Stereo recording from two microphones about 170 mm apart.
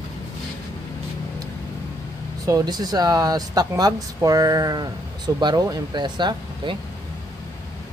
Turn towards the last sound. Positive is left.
turn(degrees=-30)  # may be behind; listen again after turning